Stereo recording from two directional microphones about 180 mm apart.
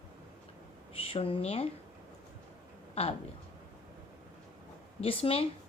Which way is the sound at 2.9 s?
35° left (ahead or behind).